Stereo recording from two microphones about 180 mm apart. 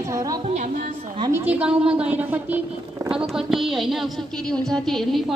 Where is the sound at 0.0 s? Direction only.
20° right (ahead or behind).